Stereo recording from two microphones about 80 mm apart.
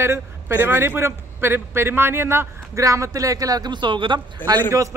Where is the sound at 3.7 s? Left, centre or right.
Right.